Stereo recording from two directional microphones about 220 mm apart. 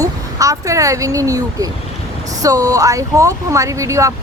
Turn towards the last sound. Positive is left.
turn(degrees=-15)  # may be behind; listen again after turning